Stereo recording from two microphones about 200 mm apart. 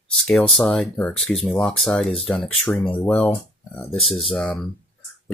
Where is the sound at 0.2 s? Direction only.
5° left (ahead or behind).